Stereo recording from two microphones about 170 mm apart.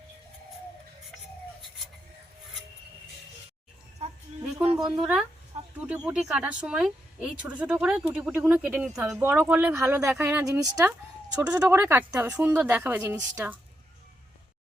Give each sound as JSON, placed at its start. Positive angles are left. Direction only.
{"t": 4.0, "sound": "music", "side_deg": -40}
{"t": 4.8, "sound": "a woman's voice", "side_deg": -5}